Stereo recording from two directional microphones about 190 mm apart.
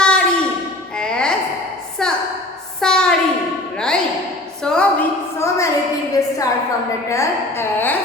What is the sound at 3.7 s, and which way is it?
Music, 5° left (ahead or behind).